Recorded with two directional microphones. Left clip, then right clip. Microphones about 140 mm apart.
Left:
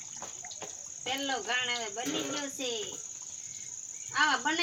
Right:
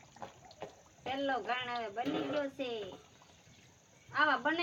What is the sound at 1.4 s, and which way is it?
Speech, 10° right (ahead or behind).